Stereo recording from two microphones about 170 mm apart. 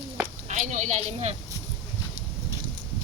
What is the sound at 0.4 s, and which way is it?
Speech, 45° right (ahead or behind).